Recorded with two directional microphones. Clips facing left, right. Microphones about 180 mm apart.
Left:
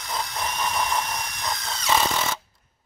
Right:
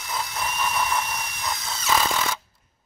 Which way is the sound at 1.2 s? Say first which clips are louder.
Even; 5° right (ahead or behind).